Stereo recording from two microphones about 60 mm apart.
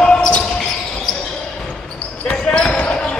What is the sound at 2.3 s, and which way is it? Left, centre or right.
Basketball bounce, centre.